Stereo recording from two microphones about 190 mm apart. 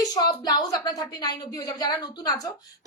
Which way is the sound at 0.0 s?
20° left (ahead or behind).